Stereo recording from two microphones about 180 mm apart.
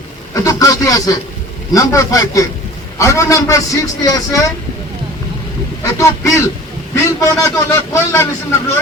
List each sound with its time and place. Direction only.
0.4 s vehicle: 20° left (ahead or behind)
1.7 s a man's voice: 20° left (ahead or behind)
5.8 s a man's voice: 15° left (ahead or behind)